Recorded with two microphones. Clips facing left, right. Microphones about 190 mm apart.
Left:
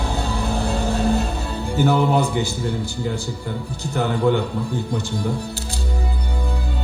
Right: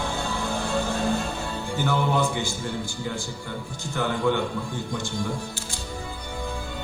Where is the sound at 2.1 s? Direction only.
35° left (ahead or behind).